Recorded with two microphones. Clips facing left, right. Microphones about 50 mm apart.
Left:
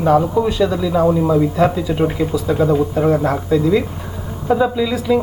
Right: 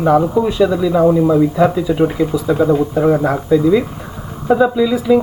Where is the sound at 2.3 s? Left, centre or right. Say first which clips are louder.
Right 2 dB; centre.